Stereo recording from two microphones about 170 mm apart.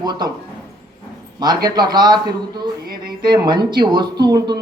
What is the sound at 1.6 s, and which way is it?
Speech, 25° right (ahead or behind).